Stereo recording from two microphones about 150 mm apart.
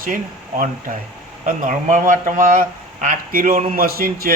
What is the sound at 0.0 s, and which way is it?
A man's voice, 65° right (ahead or behind).